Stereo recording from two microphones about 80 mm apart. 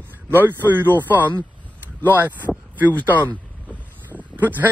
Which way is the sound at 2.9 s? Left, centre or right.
Left.